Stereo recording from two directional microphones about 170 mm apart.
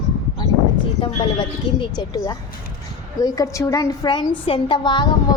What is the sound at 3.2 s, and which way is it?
A woman's voice, 20° left (ahead or behind).